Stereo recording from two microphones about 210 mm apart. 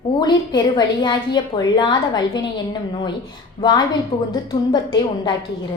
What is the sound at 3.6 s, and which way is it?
A woman's voice, 20° left (ahead or behind).